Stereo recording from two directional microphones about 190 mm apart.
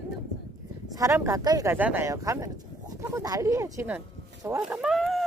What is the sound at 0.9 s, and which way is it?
Speech, 15° right (ahead or behind).